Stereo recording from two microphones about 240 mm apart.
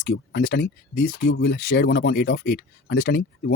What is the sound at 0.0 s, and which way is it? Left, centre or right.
Speech, left.